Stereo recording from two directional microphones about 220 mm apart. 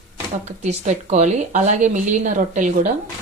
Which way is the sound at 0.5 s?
30° right (ahead or behind).